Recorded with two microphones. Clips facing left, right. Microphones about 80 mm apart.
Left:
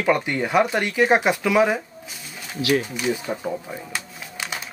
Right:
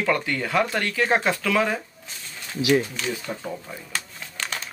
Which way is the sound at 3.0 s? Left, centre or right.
Centre.